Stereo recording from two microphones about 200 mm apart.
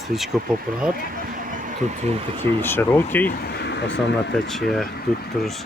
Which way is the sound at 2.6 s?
10° left (ahead or behind).